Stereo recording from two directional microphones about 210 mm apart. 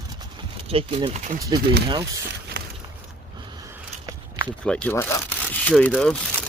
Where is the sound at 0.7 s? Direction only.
25° right (ahead or behind).